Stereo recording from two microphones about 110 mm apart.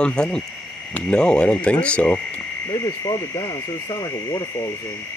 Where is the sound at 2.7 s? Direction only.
25° left (ahead or behind).